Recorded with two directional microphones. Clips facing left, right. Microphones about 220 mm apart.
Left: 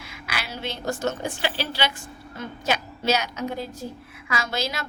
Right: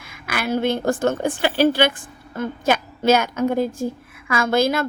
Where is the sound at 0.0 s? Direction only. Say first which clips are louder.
Right 8 dB; 50° right (ahead or behind).